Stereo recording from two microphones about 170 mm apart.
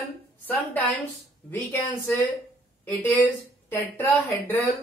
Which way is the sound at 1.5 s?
10° left (ahead or behind).